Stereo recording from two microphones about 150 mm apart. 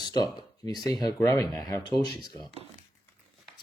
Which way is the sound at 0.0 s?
30° left (ahead or behind).